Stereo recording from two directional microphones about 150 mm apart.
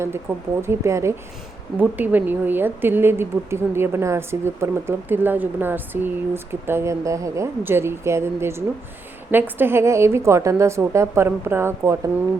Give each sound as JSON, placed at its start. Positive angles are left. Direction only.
{"t": 0.0, "sound": "a woman's voice", "side_deg": -15}